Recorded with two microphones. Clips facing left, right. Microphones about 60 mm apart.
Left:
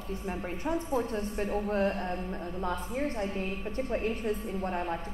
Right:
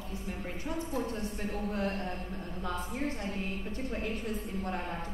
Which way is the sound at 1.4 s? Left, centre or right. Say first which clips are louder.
Left 7 dB; left.